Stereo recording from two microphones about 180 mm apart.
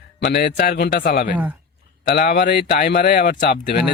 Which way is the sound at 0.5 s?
55° left (ahead or behind).